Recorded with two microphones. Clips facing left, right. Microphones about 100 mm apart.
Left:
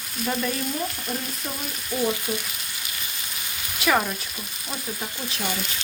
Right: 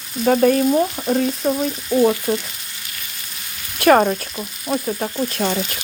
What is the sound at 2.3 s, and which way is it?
Frying, 55° right (ahead or behind).